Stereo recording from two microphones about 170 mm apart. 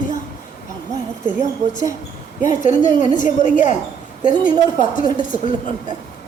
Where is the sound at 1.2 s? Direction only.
50° left (ahead or behind).